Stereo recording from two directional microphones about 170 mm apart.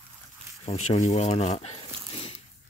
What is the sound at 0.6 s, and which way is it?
Speech, 40° left (ahead or behind).